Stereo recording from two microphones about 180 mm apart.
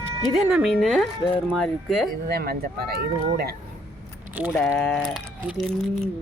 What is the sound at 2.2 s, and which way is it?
Speech, 60° right (ahead or behind).